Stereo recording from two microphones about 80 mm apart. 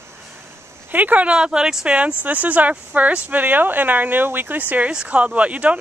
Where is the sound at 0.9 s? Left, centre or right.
Centre.